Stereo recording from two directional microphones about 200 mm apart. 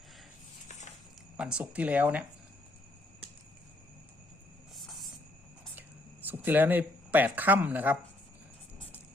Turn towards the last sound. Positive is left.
turn(degrees=-10)  # may be behind; listen again after turning